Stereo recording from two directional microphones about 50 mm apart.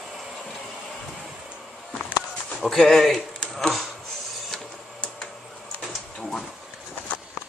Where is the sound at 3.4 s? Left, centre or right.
Centre.